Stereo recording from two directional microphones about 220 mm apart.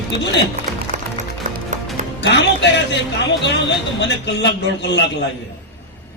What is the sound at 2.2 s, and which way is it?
Speech, 50° left (ahead or behind).